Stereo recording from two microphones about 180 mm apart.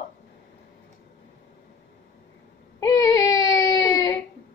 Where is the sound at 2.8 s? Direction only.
20° left (ahead or behind).